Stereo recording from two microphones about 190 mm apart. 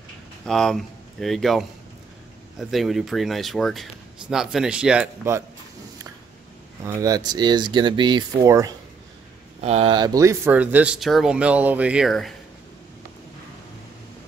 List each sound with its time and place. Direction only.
0.5 s speech: centre (ahead or behind)
2.7 s speech: centre (ahead or behind)
6.8 s speech: 15° right (ahead or behind)
9.6 s speech: 30° right (ahead or behind); by 12.4 s centre (ahead or behind)